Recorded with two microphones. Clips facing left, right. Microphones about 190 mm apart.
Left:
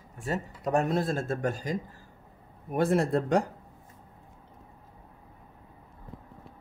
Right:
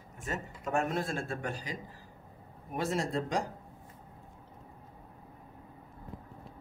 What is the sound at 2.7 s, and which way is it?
Speech, 55° left (ahead or behind).